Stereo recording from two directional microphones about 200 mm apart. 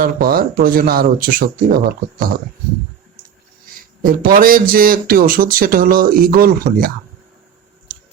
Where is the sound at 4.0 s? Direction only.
45° right (ahead or behind).